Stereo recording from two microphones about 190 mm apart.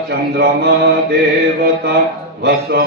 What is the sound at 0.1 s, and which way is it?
Mantra, 60° right (ahead or behind).